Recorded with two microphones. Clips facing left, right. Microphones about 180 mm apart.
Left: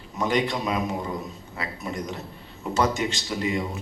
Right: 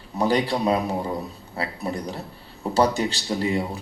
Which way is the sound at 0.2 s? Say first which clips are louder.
Right 3 dB; 35° right (ahead or behind).